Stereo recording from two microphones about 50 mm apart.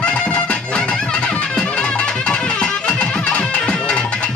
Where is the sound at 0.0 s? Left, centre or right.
Centre.